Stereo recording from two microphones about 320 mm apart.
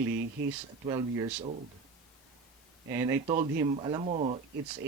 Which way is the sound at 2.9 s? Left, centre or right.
Centre.